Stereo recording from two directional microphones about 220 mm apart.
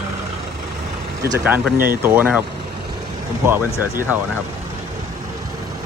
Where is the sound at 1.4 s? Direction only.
5° right (ahead or behind).